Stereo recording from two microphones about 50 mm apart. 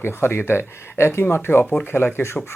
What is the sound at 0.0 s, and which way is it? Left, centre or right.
Speech, left.